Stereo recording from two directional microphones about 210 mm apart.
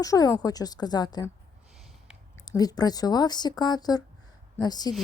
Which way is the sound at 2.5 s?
20° left (ahead or behind).